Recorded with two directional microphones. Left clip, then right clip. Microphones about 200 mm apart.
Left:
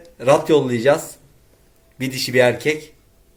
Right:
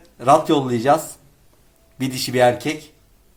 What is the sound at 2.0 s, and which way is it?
Speech, 50° right (ahead or behind).